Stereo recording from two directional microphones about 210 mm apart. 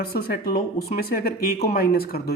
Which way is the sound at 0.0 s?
45° left (ahead or behind).